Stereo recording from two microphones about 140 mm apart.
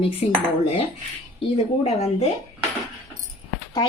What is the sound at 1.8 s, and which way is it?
Speech, 45° left (ahead or behind).